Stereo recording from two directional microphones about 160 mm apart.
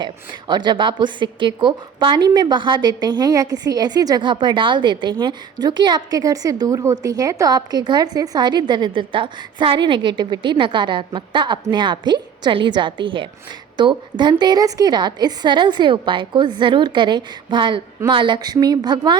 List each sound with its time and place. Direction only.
0.0 s a woman's voice: 30° right (ahead or behind)